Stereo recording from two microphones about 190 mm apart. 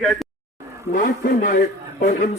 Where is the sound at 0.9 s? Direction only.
45° left (ahead or behind).